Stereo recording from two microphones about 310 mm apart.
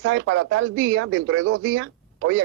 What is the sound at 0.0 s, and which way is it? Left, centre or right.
Speech, right.